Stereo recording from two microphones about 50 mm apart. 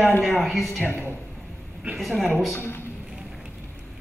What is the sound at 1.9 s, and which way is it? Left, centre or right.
Speech, centre.